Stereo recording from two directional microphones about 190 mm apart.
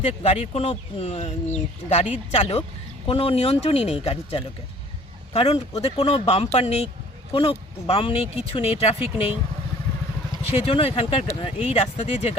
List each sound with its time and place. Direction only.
0.1 s a man's voice: 35° left (ahead or behind)
10.5 s speech: 30° left (ahead or behind)